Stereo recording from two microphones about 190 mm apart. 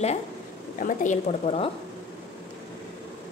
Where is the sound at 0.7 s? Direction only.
40° left (ahead or behind).